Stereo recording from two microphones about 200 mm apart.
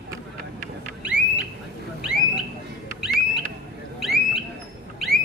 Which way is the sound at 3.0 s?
Centre (ahead or behind).